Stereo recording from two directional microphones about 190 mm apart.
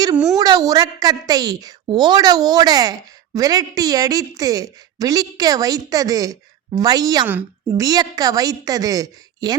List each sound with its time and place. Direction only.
0.3 s a woman's voice: 20° right (ahead or behind)